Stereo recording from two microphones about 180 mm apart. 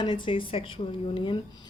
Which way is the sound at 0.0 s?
25° left (ahead or behind).